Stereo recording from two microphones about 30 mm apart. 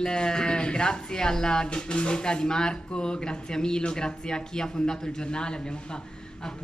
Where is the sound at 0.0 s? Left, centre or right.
Left.